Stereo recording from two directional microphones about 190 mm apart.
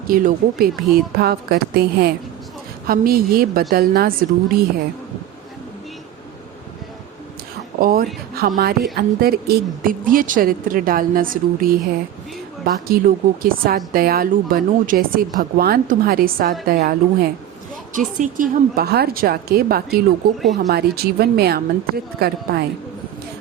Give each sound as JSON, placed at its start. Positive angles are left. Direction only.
{"t": 0.1, "sound": "a woman's voice", "side_deg": -45}
{"t": 7.8, "sound": "a woman's voice", "side_deg": -50}
{"t": 12.9, "sound": "a woman's voice", "side_deg": -50}